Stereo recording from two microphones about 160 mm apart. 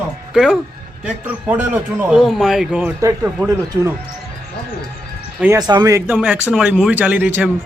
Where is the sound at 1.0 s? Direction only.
10° right (ahead or behind).